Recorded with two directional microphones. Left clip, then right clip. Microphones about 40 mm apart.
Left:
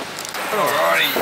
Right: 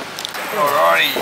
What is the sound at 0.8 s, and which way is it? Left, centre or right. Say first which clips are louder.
Speech: right 4 dB; right.